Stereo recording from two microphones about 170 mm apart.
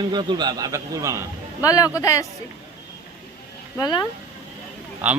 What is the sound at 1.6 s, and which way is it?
Speech, 20° left (ahead or behind).